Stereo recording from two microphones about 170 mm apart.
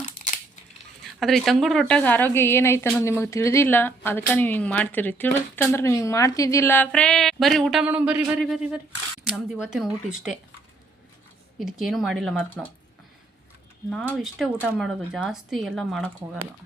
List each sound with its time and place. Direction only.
1.2 s speech: centre (ahead or behind)
11.6 s speech: centre (ahead or behind)
13.9 s speech: centre (ahead or behind)